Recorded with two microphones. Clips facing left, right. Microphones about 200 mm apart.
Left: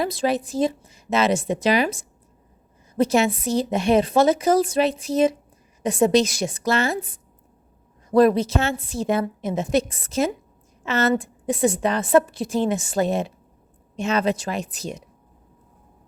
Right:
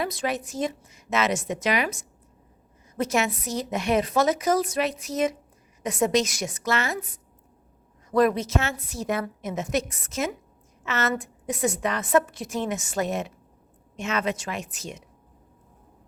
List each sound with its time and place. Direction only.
0.0 s a woman's voice: 30° left (ahead or behind)